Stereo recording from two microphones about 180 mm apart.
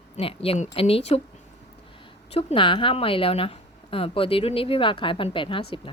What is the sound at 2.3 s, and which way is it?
Speech, 30° left (ahead or behind).